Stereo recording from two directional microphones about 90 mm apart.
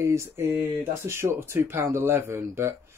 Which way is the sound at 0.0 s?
30° right (ahead or behind).